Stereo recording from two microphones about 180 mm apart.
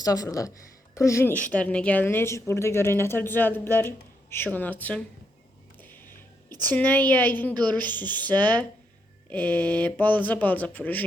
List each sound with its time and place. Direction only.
0.0 s a woman's voice: 20° left (ahead or behind)
5.8 s music: 10° left (ahead or behind)
6.7 s a woman's voice: 10° left (ahead or behind)